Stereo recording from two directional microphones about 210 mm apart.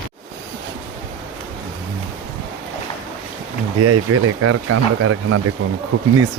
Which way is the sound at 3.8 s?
90° right.